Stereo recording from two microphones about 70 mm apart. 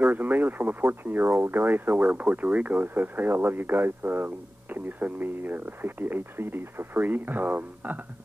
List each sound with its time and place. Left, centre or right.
0.0 s speech: right